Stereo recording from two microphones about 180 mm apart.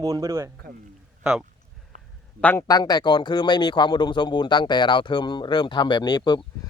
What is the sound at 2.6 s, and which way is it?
Speech, 20° left (ahead or behind).